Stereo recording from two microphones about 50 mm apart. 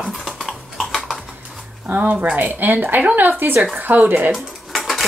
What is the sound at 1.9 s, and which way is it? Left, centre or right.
Speech, right.